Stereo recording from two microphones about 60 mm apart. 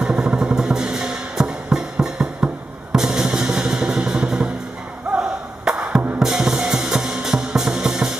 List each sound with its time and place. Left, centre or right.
0.0 s music: centre
2.9 s drum: centre
5.1 s a sound: centre
5.8 s music: centre